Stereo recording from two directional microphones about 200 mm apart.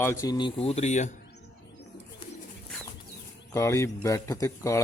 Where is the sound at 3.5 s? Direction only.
15° left (ahead or behind).